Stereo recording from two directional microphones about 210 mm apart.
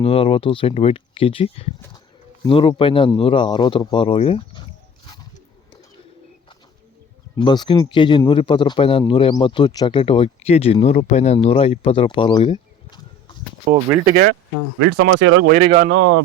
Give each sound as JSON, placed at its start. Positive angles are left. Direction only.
{"t": 0.0, "sound": "speech", "side_deg": 25}
{"t": 7.3, "sound": "speech", "side_deg": 20}
{"t": 13.7, "sound": "speech", "side_deg": -35}
{"t": 14.8, "sound": "speech", "side_deg": -70}
{"t": 15.6, "sound": "speech", "side_deg": -35}
{"t": 15.9, "sound": "speech", "side_deg": -70}